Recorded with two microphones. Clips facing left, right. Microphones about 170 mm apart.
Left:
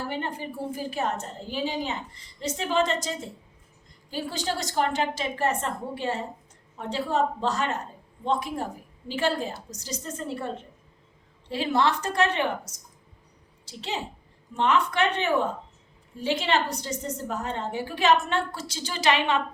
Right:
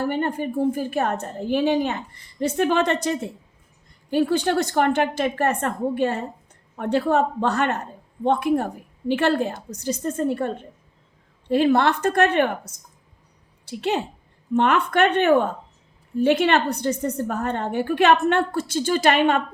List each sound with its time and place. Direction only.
0.0 s a woman's voice: 50° right (ahead or behind)